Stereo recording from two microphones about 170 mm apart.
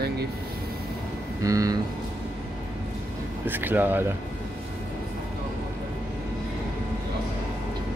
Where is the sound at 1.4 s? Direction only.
20° right (ahead or behind).